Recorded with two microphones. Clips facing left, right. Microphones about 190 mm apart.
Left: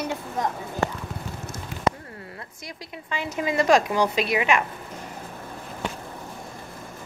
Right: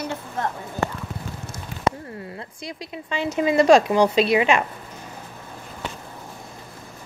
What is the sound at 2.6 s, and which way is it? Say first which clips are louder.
A woman's voice: right 6 dB; 25° right (ahead or behind).